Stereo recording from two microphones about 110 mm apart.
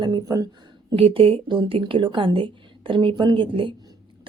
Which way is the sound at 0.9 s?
60° right (ahead or behind).